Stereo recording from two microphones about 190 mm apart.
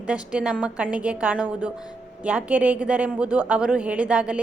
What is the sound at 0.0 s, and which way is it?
A woman's voice, 5° right (ahead or behind).